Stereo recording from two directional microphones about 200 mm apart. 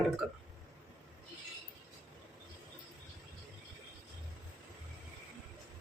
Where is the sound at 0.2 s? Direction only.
5° right (ahead or behind).